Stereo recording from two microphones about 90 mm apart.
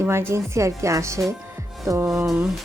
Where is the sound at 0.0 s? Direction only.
30° right (ahead or behind).